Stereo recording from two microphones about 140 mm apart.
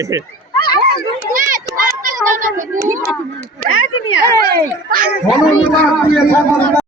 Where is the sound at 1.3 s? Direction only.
75° right (ahead or behind).